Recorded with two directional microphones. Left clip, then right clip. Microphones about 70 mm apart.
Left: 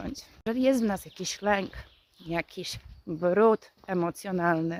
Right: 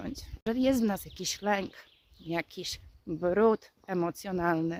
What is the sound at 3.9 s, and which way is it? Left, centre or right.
Speech, right.